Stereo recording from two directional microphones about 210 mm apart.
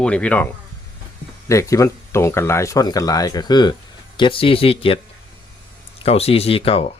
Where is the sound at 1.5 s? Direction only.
15° left (ahead or behind).